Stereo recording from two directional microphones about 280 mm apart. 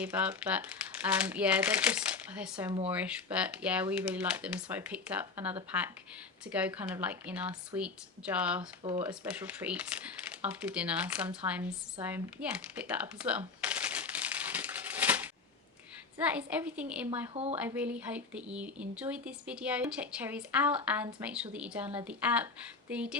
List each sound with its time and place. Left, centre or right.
0.0 s speech: centre
8.8 s speech: centre
9.2 s speech: centre
11.9 s a sound: centre
16.1 s speech: centre
17.1 s speech: centre
17.5 s speech: centre